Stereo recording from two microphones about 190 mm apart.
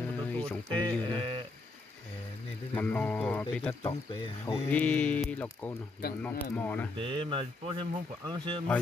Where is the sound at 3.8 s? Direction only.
30° left (ahead or behind).